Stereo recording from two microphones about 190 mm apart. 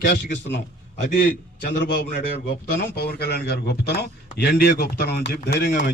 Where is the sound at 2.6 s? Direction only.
50° left (ahead or behind).